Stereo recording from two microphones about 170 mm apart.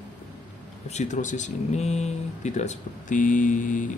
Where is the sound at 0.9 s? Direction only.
45° left (ahead or behind).